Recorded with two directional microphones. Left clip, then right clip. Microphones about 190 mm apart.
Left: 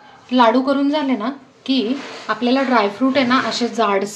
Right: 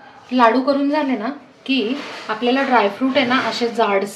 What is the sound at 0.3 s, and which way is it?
Speech, 50° left (ahead or behind).